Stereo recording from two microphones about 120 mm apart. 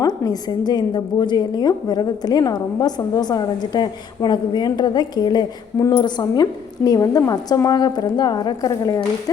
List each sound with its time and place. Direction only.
0.0 s a woman's voice: 35° left (ahead or behind)